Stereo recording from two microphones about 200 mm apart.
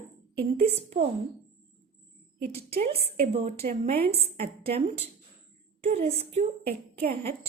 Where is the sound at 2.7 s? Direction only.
30° right (ahead or behind).